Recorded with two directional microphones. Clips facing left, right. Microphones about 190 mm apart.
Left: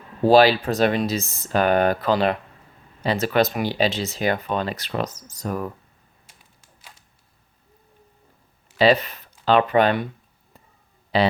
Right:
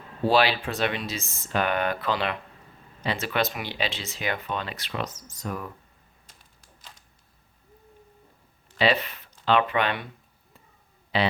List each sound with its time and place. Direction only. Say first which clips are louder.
0.2 s speech: left 7 dB; 40° left (ahead or behind)
8.8 s speech: left 6 dB; 40° left (ahead or behind)
11.1 s speech: left 5 dB; 40° left (ahead or behind)